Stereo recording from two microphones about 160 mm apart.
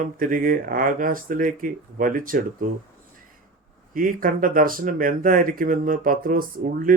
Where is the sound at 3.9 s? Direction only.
60° right (ahead or behind).